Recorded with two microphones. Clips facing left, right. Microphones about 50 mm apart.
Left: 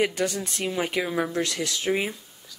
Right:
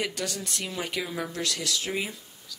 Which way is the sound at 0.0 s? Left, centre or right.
Left.